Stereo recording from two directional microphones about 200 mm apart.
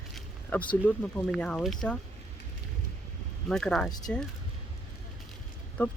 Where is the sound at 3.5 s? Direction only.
5° left (ahead or behind).